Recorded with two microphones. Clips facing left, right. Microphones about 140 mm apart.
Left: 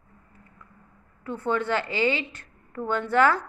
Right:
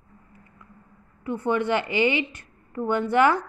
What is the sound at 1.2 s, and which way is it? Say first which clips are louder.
A woman's voice: right 2 dB; 15° right (ahead or behind).